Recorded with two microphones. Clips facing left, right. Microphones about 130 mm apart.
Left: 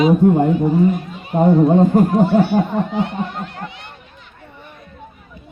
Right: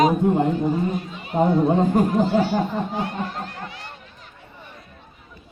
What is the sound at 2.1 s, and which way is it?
Speech, 60° left (ahead or behind).